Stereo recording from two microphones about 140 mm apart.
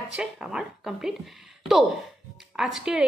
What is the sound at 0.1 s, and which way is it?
A woman's voice, 5° right (ahead or behind).